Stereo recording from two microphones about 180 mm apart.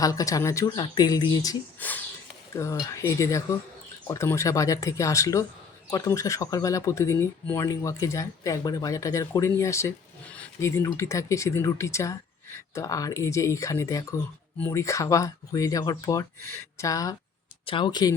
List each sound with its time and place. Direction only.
0.0 s speech: 20° left (ahead or behind)